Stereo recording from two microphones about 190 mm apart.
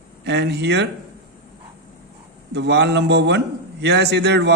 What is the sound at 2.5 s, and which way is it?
A man's voice, 65° right (ahead or behind).